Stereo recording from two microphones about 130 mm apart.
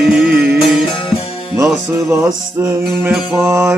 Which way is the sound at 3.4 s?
20° right (ahead or behind).